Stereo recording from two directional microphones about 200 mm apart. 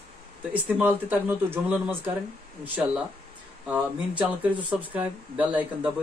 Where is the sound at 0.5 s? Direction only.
10° right (ahead or behind).